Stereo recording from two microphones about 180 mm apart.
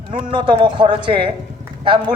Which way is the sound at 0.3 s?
25° right (ahead or behind).